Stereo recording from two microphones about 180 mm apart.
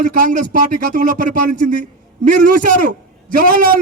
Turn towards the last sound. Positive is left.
turn(degrees=-50)  # may be behind; listen again after turning